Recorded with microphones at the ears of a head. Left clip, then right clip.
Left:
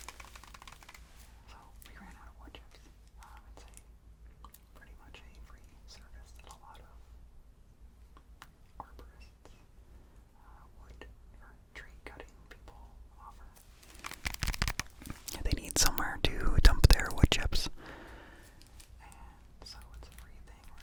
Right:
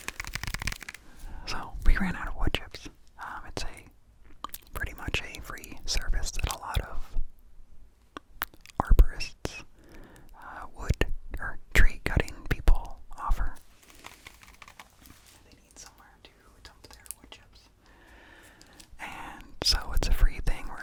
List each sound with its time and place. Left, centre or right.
0.0 s whispering: right
14.1 s whispering: left
18.4 s whispering: right